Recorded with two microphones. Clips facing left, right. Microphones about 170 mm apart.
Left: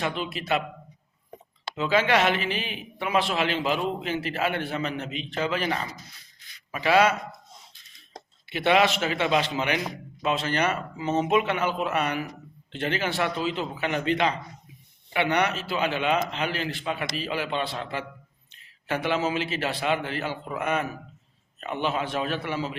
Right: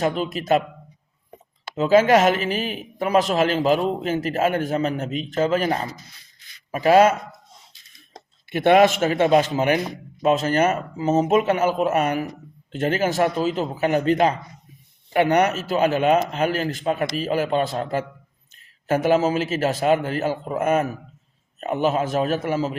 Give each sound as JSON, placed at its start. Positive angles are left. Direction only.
{"t": 0.0, "sound": "a man's voice", "side_deg": -40}
{"t": 1.7, "sound": "a man's voice", "side_deg": -40}
{"t": 8.4, "sound": "a man's voice", "side_deg": -50}